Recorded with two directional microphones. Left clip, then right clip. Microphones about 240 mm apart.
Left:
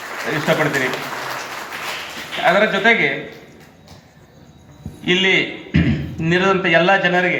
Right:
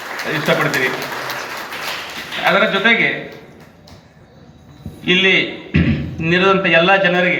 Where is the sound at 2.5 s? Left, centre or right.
Left.